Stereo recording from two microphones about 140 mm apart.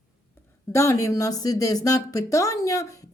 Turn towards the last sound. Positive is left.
turn(degrees=25)  # may be behind; listen again after turning